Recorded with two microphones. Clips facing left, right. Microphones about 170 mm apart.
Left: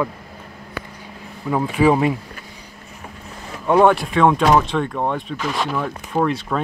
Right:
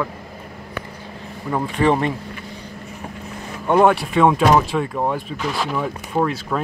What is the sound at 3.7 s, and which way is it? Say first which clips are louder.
Speech: left 1 dB; centre (ahead or behind).